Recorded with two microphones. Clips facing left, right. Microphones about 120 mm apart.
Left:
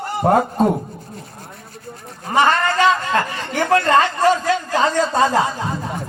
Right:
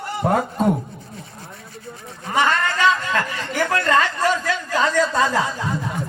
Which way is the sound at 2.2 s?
35° left (ahead or behind).